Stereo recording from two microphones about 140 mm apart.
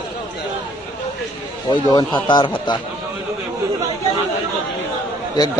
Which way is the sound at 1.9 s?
30° left (ahead or behind).